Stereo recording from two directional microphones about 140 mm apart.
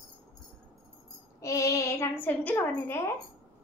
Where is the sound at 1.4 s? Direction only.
20° left (ahead or behind).